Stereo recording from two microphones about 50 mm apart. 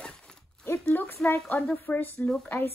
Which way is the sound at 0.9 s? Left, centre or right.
Left.